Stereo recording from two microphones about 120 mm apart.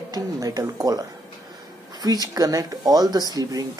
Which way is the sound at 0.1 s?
30° right (ahead or behind).